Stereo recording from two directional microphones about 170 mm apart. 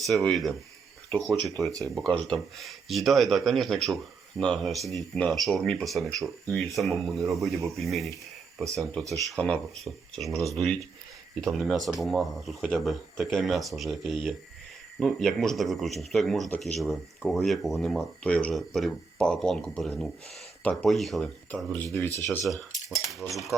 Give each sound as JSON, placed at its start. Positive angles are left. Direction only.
{"t": 0.0, "sound": "speech", "side_deg": 5}
{"t": 23.0, "sound": "speech", "side_deg": 0}